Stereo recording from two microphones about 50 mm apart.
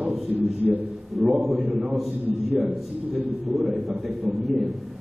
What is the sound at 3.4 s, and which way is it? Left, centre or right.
A man's voice, centre.